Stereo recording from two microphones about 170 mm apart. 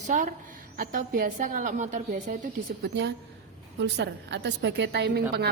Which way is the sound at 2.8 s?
90° right.